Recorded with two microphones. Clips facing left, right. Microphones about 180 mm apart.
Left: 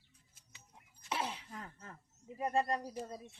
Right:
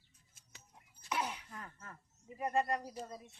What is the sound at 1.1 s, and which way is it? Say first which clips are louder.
Throat clearing: even; 30° left (ahead or behind).